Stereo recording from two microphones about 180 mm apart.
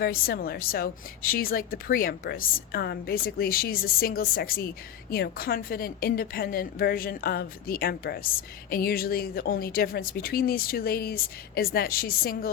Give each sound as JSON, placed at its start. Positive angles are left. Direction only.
{"t": 0.0, "sound": "a woman's voice", "side_deg": 55}